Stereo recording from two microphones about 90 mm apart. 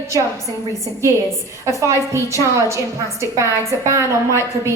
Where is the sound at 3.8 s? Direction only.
30° right (ahead or behind).